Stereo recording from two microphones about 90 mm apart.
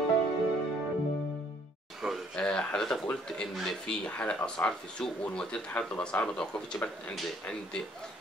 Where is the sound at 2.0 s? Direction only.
5° right (ahead or behind).